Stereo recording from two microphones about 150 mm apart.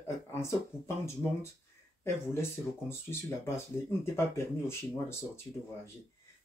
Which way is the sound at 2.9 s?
15° left (ahead or behind).